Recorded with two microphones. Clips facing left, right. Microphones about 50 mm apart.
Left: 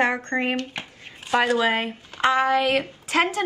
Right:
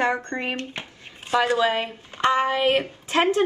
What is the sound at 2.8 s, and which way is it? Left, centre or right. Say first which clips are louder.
Child singing: right 1 dB; right.